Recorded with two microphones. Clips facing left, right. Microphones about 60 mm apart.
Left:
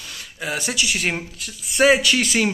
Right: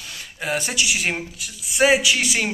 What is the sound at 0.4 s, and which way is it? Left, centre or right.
Speech, right.